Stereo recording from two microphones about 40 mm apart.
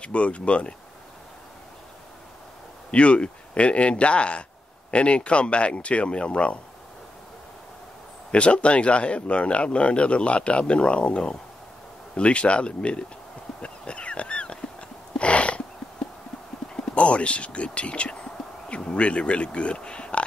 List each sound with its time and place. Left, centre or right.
0.0 s speech: left
2.9 s speech: left
8.3 s speech: left
13.6 s a sound: left
16.7 s whispering: left
18.7 s speech: left